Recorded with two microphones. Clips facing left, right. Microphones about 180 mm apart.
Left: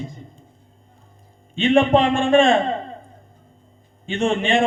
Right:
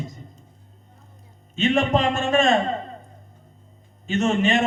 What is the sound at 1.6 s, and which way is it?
A man's voice, 40° right (ahead or behind).